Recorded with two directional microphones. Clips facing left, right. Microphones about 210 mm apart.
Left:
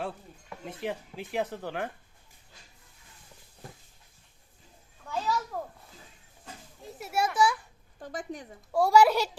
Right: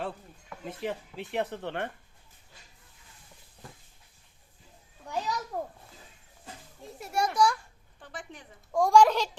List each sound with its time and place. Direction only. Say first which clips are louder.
0.5 s speech: even; centre (ahead or behind)
5.0 s a sound: left 2 dB; 15° right (ahead or behind)
6.8 s children playing: even; 5° left (ahead or behind)
7.9 s speech: left 7 dB; 40° left (ahead or behind)
8.7 s a child's voice: even; 5° left (ahead or behind)